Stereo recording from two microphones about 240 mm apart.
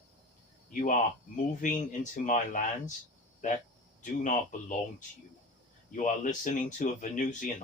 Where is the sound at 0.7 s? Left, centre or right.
Left.